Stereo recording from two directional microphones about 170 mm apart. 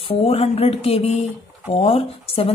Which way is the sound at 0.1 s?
35° left (ahead or behind).